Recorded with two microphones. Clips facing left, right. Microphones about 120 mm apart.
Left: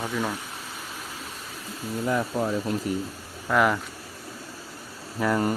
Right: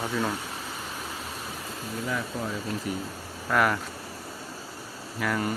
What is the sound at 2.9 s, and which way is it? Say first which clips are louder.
Speech: left 2 dB; 40° left (ahead or behind).